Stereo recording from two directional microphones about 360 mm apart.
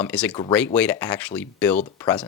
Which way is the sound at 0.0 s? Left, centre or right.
Centre.